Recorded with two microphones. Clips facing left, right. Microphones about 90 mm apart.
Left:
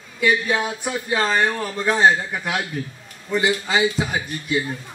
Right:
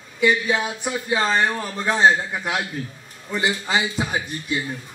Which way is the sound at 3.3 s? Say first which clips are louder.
Left 2 dB; 5° right (ahead or behind).